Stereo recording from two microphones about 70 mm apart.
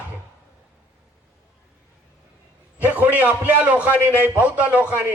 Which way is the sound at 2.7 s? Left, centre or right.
Right.